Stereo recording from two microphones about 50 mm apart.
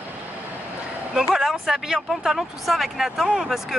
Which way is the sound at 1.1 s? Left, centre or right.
Centre.